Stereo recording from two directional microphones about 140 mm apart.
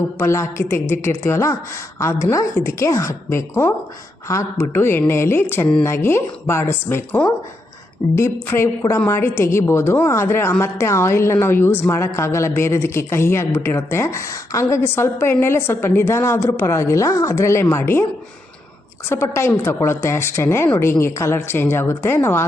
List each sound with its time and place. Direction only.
0.2 s a woman's voice: 20° left (ahead or behind)
19.0 s a woman's voice: 20° left (ahead or behind)